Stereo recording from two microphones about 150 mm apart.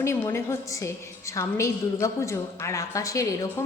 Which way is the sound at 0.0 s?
15° left (ahead or behind).